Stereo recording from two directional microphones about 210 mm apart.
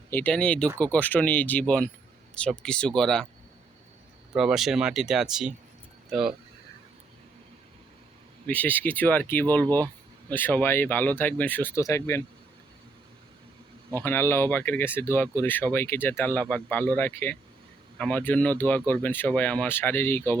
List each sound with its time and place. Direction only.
0.1 s speech: 10° left (ahead or behind)
4.4 s speech: centre (ahead or behind)
8.4 s speech: 10° left (ahead or behind)
13.9 s speech: 10° left (ahead or behind)